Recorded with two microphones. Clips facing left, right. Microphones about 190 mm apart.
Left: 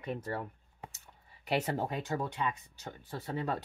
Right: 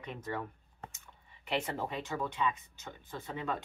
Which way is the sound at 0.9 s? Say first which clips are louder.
Even; 40° left (ahead or behind).